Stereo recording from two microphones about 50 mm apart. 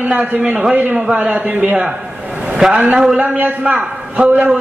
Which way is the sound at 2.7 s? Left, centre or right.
Centre.